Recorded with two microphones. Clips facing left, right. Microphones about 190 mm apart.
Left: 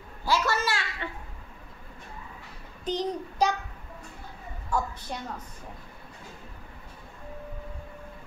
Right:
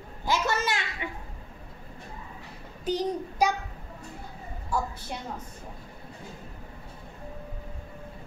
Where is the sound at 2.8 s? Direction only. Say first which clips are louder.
Right 2 dB; 10° right (ahead or behind).